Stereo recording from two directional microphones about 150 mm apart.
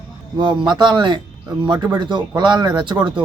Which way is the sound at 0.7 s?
30° right (ahead or behind).